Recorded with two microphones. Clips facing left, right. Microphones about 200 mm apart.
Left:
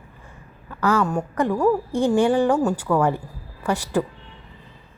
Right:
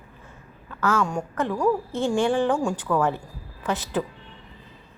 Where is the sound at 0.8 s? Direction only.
10° left (ahead or behind).